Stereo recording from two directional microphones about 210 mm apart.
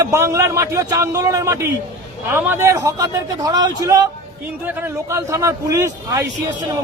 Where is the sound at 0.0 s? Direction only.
15° right (ahead or behind).